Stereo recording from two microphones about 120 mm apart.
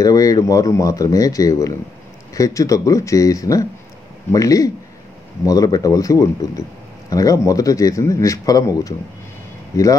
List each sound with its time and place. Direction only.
0.0 s speech: 30° left (ahead or behind)